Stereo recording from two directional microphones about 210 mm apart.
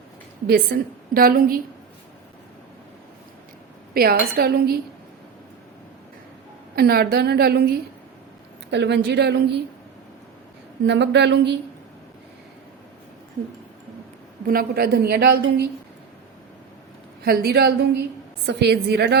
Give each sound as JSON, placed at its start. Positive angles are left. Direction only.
{"t": 0.4, "sound": "a woman's voice", "side_deg": -45}
{"t": 3.9, "sound": "a woman's voice", "side_deg": -45}
{"t": 6.7, "sound": "a woman's voice", "side_deg": -45}
{"t": 10.8, "sound": "speech", "side_deg": -55}
{"t": 14.4, "sound": "a woman's voice", "side_deg": -45}
{"t": 17.2, "sound": "a woman's voice", "side_deg": -45}